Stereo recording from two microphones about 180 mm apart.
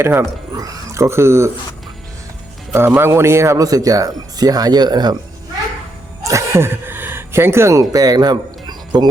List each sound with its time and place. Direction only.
0.0 s speech: 15° right (ahead or behind)
2.7 s speech: 15° right (ahead or behind)
6.2 s speech: 15° right (ahead or behind)